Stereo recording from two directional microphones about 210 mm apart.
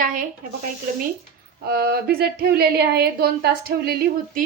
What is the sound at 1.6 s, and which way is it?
A woman's voice, 45° right (ahead or behind).